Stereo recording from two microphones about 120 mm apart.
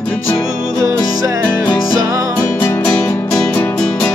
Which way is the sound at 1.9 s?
30° right (ahead or behind).